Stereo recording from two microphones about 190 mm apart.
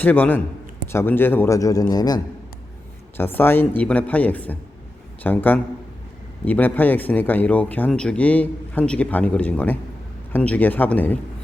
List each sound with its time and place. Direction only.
0.0 s speech: 10° left (ahead or behind)